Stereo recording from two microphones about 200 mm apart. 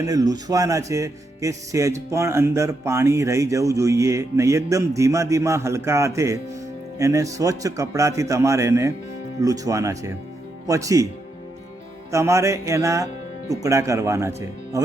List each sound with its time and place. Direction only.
0.0 s speech: 15° right (ahead or behind)
12.1 s speech: 15° right (ahead or behind)